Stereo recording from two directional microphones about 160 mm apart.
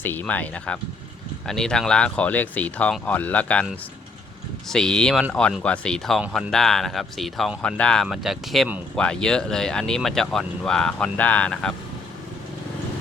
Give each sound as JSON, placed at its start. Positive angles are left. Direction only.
{"t": 0.0, "sound": "speech", "side_deg": 10}
{"t": 4.7, "sound": "speech", "side_deg": 5}